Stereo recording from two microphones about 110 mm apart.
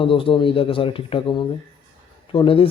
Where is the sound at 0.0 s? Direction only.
55° left (ahead or behind).